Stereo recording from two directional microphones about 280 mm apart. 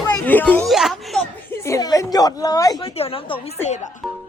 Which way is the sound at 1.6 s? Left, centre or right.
Centre.